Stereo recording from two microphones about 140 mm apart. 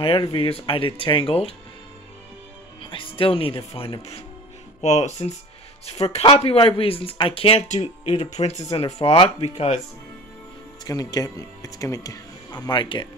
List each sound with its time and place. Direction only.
0.0 s speech: 40° left (ahead or behind)
2.8 s speech: 40° left (ahead or behind)
7.6 s speech: 55° left (ahead or behind)
10.8 s speech: 25° left (ahead or behind)